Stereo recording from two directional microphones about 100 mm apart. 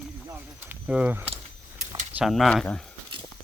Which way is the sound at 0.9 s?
10° right (ahead or behind).